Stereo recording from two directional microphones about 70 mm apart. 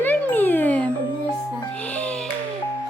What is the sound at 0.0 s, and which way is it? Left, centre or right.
Music, left.